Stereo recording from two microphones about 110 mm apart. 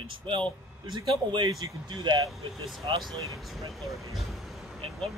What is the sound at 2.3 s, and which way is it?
Speech, centre (ahead or behind).